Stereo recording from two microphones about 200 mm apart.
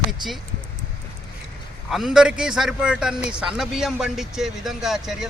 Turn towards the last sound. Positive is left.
turn(degrees=0)  # may be behind; listen again after turning